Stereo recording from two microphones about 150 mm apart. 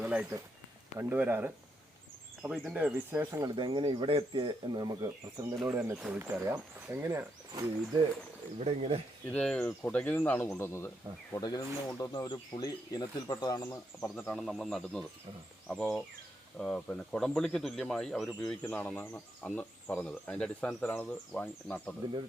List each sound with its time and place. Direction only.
0.0 s speech: 10° right (ahead or behind)
3.5 s speech: 30° right (ahead or behind)
8.5 s speech: 45° right (ahead or behind)
9.3 s speech: 5° left (ahead or behind); by 13.7 s 25° left (ahead or behind)
13.7 s speech: 10° left (ahead or behind)
14.3 s speech: centre (ahead or behind)